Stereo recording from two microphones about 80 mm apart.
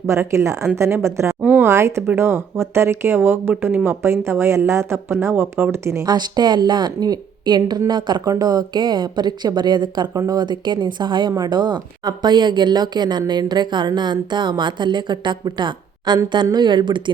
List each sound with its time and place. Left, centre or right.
0.1 s speech: right
1.4 s speech: centre
1.6 s speech: right
6.1 s a woman's voice: right
8.2 s a woman's voice: right
10.2 s a woman's voice: right